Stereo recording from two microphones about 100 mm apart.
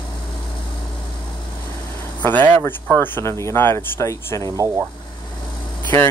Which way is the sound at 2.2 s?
20° left (ahead or behind).